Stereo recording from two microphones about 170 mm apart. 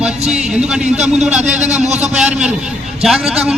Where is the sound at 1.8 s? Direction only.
40° right (ahead or behind).